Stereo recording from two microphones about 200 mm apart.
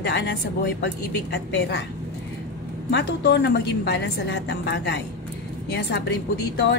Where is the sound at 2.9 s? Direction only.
60° left (ahead or behind).